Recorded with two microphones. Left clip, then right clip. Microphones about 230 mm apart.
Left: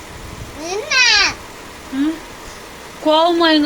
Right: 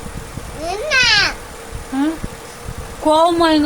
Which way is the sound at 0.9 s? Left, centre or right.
Centre.